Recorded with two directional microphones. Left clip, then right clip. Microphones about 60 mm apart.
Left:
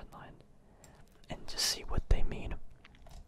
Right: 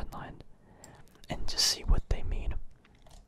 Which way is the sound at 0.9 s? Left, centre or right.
Right.